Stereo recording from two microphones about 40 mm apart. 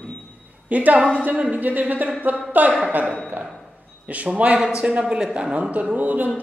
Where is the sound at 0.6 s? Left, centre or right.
Right.